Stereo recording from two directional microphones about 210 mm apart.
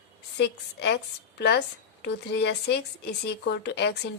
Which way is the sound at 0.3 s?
50° left (ahead or behind).